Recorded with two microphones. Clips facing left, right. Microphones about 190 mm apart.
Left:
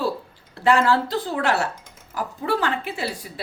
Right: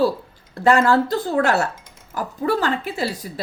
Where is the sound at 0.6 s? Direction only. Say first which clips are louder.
Right 3 dB; 45° right (ahead or behind).